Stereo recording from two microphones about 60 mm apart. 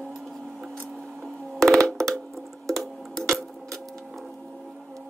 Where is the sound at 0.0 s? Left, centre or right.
Centre.